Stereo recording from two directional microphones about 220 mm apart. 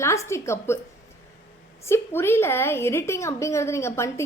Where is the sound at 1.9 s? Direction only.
10° left (ahead or behind).